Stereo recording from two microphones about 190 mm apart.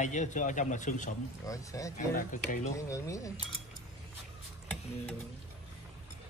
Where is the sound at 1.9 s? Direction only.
45° left (ahead or behind).